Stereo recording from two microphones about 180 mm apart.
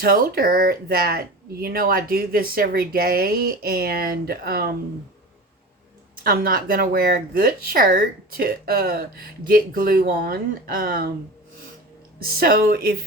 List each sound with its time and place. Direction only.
0.0 s speech: 55° right (ahead or behind)
6.2 s speech: 55° right (ahead or behind)
12.2 s speech: 55° right (ahead or behind)